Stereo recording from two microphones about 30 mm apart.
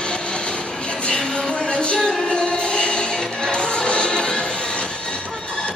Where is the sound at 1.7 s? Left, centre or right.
Left.